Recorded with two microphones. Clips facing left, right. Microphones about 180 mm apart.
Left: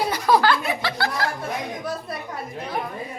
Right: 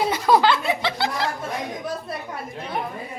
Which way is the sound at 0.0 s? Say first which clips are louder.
Right 1 dB; 20° right (ahead or behind).